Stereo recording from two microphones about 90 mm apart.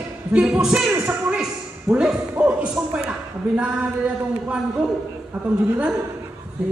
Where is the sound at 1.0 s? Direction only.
10° right (ahead or behind).